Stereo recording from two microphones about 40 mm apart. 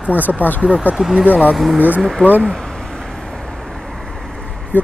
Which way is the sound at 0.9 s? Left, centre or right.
Centre.